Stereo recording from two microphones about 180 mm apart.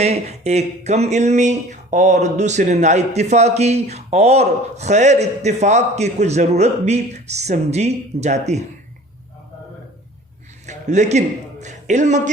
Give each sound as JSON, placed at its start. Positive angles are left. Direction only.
{"t": 0.0, "sound": "speech", "side_deg": -35}
{"t": 10.7, "sound": "a sound", "side_deg": -40}
{"t": 11.6, "sound": "speech", "side_deg": -40}